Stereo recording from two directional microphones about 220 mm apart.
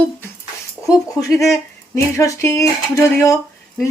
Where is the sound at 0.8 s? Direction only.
15° left (ahead or behind).